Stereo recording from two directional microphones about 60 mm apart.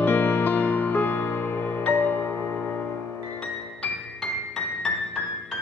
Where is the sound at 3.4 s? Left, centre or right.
Centre.